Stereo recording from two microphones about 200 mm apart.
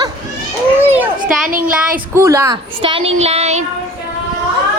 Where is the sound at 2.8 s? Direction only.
25° right (ahead or behind).